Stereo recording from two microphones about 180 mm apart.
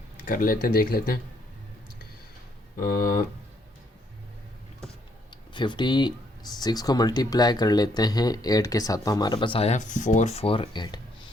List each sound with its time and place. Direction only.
0.3 s speech: 50° left (ahead or behind)
2.7 s speech: 55° left (ahead or behind)
5.5 s speech: 25° left (ahead or behind)